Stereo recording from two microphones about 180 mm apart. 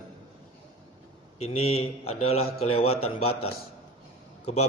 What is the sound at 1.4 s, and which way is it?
A man's voice, 35° left (ahead or behind).